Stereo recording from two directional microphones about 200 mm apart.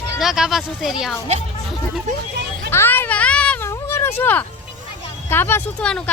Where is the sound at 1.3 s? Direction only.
35° right (ahead or behind).